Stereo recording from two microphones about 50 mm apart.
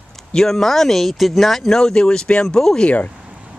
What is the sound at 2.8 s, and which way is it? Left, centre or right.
Speech, left.